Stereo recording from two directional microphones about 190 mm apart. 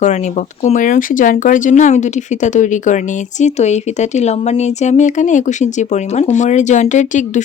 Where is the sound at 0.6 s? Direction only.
40° left (ahead or behind).